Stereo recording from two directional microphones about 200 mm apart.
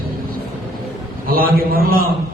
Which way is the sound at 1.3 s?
45° right (ahead or behind).